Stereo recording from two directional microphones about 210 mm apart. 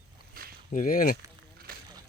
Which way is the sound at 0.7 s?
40° left (ahead or behind).